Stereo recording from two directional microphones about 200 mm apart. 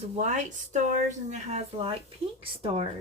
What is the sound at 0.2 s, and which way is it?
Speech, 35° right (ahead or behind).